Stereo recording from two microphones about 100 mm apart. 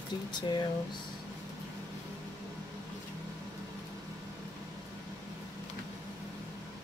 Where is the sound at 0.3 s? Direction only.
50° left (ahead or behind).